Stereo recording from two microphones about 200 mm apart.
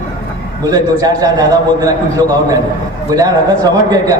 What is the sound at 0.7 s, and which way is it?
A man's voice, 20° right (ahead or behind).